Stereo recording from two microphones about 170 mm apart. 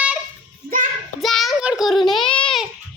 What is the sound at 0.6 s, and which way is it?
Child singing, 50° right (ahead or behind).